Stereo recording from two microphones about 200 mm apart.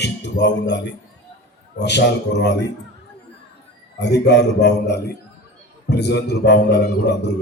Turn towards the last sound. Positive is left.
turn(degrees=60)  # may be behind; listen again after turning